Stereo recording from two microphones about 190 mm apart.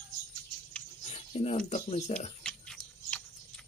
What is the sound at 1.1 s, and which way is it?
Speech, 35° left (ahead or behind).